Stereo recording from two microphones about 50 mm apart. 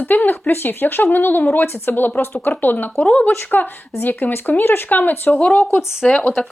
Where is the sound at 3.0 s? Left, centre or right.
Left.